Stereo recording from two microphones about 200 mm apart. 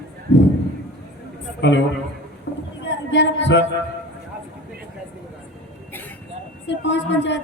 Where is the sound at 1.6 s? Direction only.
65° left (ahead or behind).